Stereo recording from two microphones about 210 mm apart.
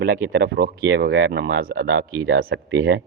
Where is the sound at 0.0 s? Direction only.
50° right (ahead or behind).